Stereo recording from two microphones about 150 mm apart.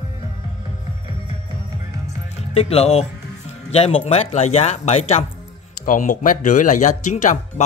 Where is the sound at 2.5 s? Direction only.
45° left (ahead or behind).